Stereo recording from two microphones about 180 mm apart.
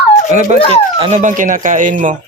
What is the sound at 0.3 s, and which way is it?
Speech, 40° right (ahead or behind).